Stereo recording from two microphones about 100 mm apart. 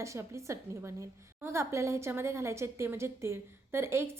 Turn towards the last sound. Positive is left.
turn(degrees=-25)  # may be behind; listen again after turning